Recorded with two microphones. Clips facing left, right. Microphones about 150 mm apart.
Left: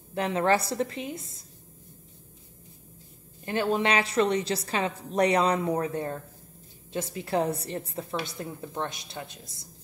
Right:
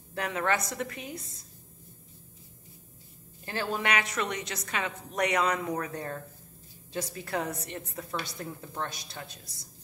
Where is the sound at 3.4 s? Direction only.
20° left (ahead or behind).